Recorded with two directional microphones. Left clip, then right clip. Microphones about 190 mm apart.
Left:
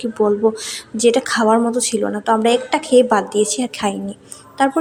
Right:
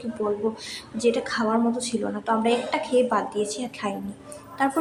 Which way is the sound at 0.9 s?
40° left (ahead or behind).